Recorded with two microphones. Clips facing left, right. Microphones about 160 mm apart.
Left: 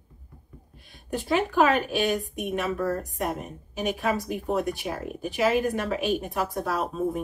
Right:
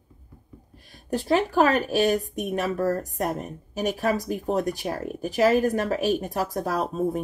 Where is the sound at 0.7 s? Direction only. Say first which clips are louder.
Right 3 dB; 40° right (ahead or behind).